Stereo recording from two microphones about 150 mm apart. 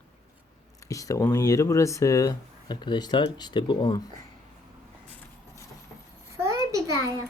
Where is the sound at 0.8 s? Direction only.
20° left (ahead or behind).